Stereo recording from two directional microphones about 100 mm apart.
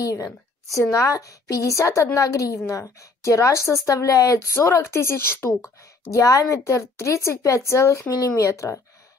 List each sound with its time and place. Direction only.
0.0 s a woman's voice: 35° left (ahead or behind)